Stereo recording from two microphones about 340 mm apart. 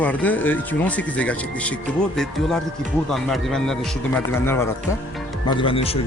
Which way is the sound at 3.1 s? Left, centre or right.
Centre.